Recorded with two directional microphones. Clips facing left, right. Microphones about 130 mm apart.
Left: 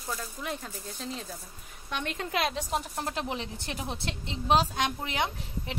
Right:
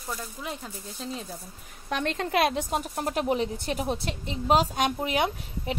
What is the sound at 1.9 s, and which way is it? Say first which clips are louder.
Speech: right 5 dB; 40° right (ahead or behind).